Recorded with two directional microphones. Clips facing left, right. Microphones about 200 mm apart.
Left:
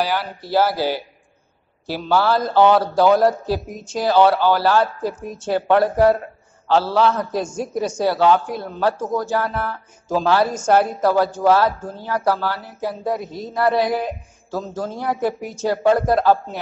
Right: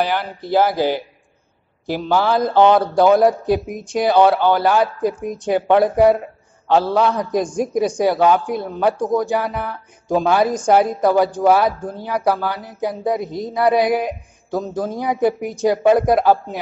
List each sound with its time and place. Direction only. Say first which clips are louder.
0.1 s a woman's voice: right 2 dB; 15° right (ahead or behind)